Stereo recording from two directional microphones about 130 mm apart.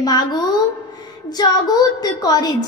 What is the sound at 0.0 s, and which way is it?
A woman's voice, 30° left (ahead or behind).